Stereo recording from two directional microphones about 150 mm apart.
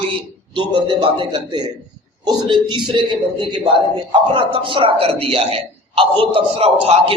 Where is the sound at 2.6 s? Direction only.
30° right (ahead or behind).